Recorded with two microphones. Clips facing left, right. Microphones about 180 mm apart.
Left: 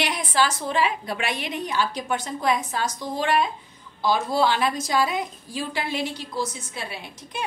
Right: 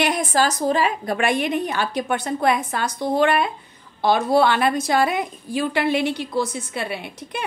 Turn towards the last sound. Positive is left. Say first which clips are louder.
# right 7 dB
turn(degrees=-60)  # may be behind; listen again after turning